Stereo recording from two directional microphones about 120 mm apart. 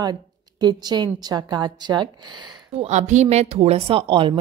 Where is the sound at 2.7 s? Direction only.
70° right (ahead or behind); by 4.4 s 45° right (ahead or behind).